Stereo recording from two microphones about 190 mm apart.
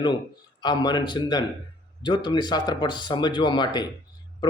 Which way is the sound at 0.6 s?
20° left (ahead or behind).